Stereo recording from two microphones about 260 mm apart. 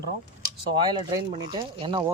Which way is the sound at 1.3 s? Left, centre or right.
Centre.